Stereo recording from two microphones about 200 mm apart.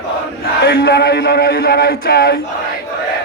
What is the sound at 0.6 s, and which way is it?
A man's voice, 55° left (ahead or behind).